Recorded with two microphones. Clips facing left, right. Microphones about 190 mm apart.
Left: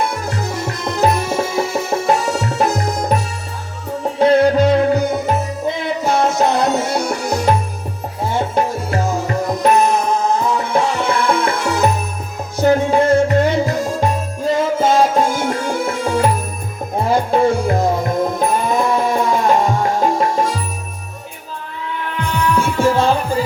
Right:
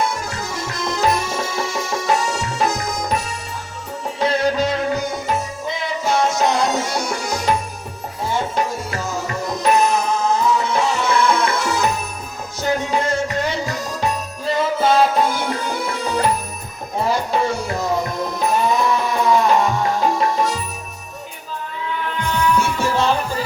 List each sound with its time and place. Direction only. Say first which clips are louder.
0.1 s music: left 4 dB; 60° left (ahead or behind)
4.2 s music: left 7 dB; 55° left (ahead or behind)
22.8 s music: left 7 dB; 50° left (ahead or behind)